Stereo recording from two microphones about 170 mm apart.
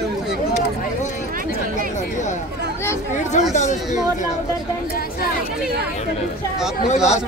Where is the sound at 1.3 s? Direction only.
55° right (ahead or behind).